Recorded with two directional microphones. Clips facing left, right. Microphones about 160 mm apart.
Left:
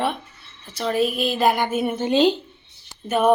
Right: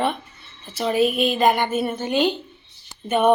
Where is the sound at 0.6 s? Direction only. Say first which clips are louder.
Right 2 dB; 5° right (ahead or behind).